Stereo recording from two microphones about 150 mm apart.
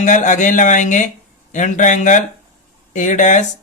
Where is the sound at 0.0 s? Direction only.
55° left (ahead or behind).